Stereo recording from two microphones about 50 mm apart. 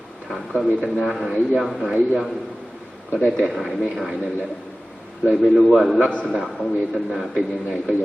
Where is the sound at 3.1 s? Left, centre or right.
Right.